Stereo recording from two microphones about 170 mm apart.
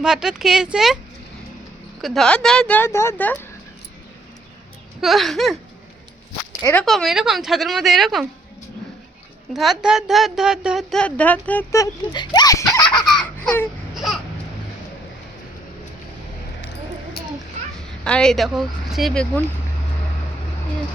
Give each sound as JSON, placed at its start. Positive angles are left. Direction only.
{"t": 0.0, "sound": "speech", "side_deg": -5}
{"t": 2.0, "sound": "speech", "side_deg": 0}
{"t": 4.9, "sound": "speech", "side_deg": 0}
{"t": 6.5, "sound": "a sound", "side_deg": 20}
{"t": 6.7, "sound": "speech", "side_deg": 0}
{"t": 9.5, "sound": "speech", "side_deg": 0}
{"t": 13.0, "sound": "baby cry", "side_deg": 5}
{"t": 17.7, "sound": "speech", "side_deg": 5}